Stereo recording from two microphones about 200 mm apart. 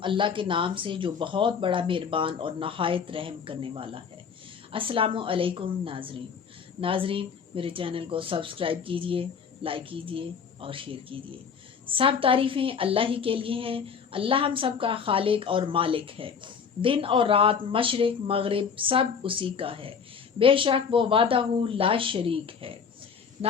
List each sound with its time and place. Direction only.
0.0 s a woman's voice: 25° right (ahead or behind)